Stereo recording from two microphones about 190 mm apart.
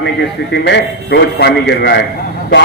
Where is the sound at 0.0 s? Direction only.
65° left (ahead or behind).